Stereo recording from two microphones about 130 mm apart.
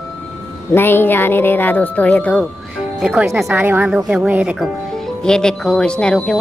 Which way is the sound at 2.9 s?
5° right (ahead or behind).